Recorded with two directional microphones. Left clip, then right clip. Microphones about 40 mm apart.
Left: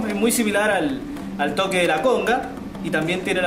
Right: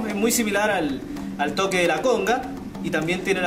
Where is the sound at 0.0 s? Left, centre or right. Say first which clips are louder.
Left 2 dB; centre.